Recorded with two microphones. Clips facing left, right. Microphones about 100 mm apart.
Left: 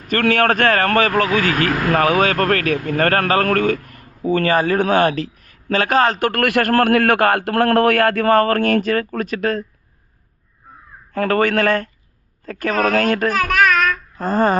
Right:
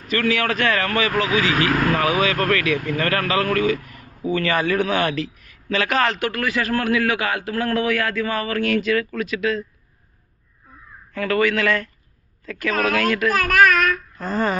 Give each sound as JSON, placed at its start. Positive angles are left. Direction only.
{"t": 0.1, "sound": "a man's voice", "side_deg": 50}
{"t": 11.1, "sound": "speech", "side_deg": 45}
{"t": 13.3, "sound": "child singing", "side_deg": 0}
{"t": 14.2, "sound": "speech", "side_deg": 45}